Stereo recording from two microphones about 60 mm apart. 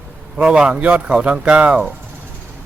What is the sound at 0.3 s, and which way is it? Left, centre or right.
A man's voice, centre.